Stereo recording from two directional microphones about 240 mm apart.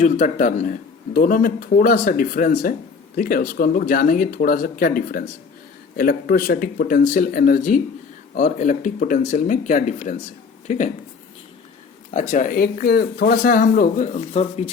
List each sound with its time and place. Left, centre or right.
0.0 s speech: left
12.3 s speech: left